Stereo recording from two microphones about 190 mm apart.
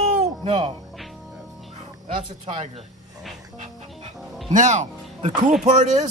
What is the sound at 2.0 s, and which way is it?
Speech, 30° right (ahead or behind).